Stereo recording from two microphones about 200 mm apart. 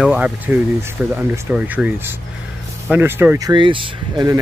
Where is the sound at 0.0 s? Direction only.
5° right (ahead or behind).